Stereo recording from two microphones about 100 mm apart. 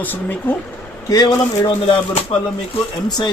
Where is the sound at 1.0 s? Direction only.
50° left (ahead or behind).